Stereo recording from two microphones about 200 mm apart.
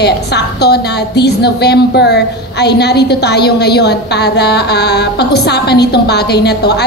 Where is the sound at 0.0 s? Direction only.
55° left (ahead or behind).